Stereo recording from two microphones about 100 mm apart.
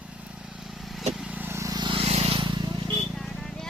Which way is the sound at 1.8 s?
65° right (ahead or behind).